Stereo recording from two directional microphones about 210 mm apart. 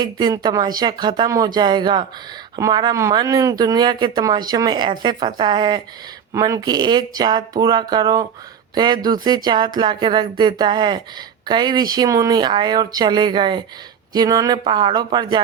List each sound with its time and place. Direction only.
0.0 s speech: 20° right (ahead or behind)